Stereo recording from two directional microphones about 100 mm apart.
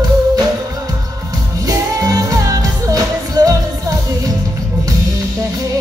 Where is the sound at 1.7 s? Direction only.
40° right (ahead or behind).